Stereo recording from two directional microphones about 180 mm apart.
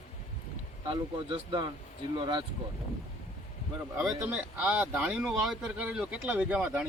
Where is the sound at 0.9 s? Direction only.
30° right (ahead or behind).